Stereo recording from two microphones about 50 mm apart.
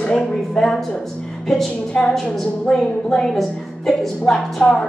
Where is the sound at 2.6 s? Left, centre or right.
Centre.